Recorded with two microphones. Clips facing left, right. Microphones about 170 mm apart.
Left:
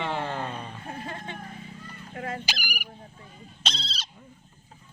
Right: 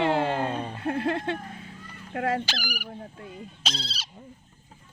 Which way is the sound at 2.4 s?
15° left (ahead or behind).